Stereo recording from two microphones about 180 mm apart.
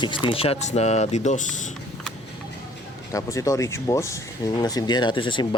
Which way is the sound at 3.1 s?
20° left (ahead or behind).